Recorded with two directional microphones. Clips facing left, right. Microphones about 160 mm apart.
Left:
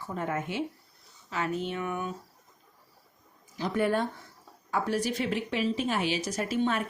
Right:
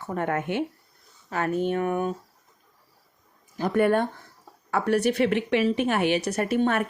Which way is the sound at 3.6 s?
55° right (ahead or behind).